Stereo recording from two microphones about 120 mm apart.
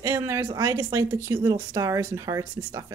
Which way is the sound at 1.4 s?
40° right (ahead or behind).